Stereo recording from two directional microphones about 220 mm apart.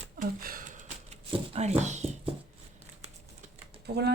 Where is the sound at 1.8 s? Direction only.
30° right (ahead or behind).